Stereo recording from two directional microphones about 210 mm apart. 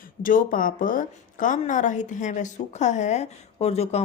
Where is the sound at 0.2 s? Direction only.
40° left (ahead or behind).